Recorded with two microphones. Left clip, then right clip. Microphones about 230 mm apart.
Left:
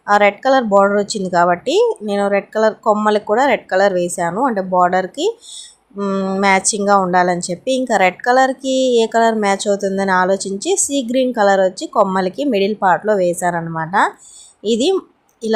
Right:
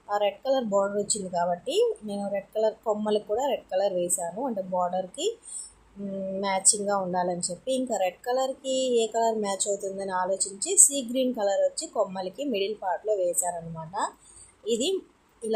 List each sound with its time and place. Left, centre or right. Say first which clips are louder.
0.1 s speech: left 13 dB; left